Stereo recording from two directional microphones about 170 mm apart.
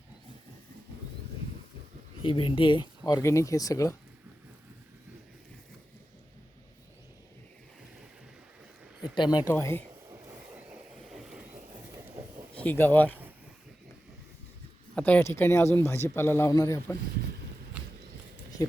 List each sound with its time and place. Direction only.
2.2 s speech: 30° left (ahead or behind)
9.1 s speech: 25° left (ahead or behind)
9.5 s a man's voice: 15° left (ahead or behind)
10.1 s vehicle: 10° right (ahead or behind)
12.5 s speech: 10° left (ahead or behind)
14.9 s a man's voice: 10° left (ahead or behind)